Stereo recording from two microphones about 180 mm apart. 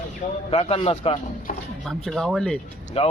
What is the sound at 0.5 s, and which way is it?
Speech, 35° left (ahead or behind).